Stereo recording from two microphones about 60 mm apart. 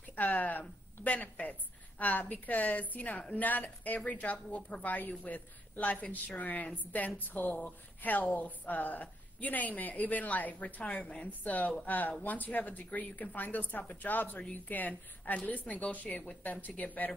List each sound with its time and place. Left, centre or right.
0.1 s a woman's voice: left